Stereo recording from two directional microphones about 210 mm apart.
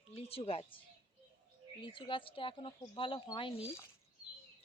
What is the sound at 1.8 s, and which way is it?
Speech, 25° left (ahead or behind).